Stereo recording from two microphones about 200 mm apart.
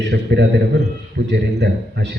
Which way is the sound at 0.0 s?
60° right (ahead or behind).